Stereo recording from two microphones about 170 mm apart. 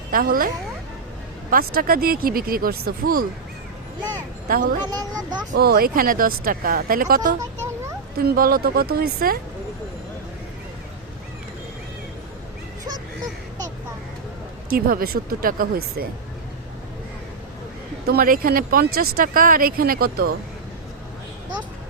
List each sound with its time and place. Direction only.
0.1 s speech: 55° right (ahead or behind)
4.4 s speech: 55° right (ahead or behind)
4.9 s a child's voice: 25° right (ahead or behind)
5.5 s speech: 65° right (ahead or behind)
14.7 s speech: 60° right (ahead or behind)
18.0 s speech: 65° right (ahead or behind)